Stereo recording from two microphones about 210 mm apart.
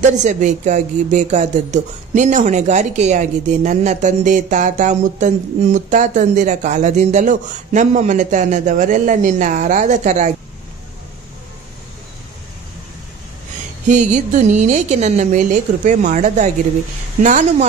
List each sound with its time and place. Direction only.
0.0 s speech: 35° right (ahead or behind)
13.8 s speech: 35° right (ahead or behind)